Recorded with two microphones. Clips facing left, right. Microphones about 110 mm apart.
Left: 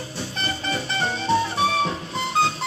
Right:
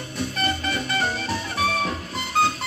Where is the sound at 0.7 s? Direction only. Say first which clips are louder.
Even; 30° left (ahead or behind).